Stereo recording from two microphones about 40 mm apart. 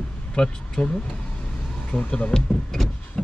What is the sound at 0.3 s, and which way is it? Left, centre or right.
Speech, left.